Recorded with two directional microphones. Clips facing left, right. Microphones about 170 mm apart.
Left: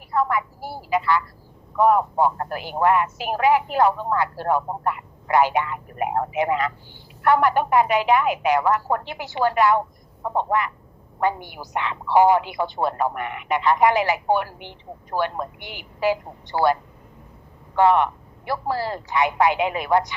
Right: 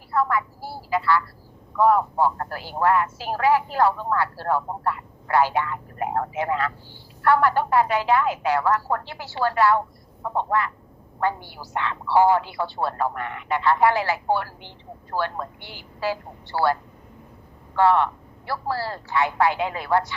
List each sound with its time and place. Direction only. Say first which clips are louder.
0.1 s a woman's voice: left 1 dB; 20° left (ahead or behind)
17.7 s a woman's voice: left 1 dB; 20° left (ahead or behind)